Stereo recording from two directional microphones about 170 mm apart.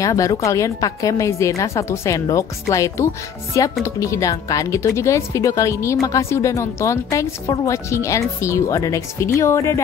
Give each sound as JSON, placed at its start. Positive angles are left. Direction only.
{"t": 0.0, "sound": "a woman's voice", "side_deg": 20}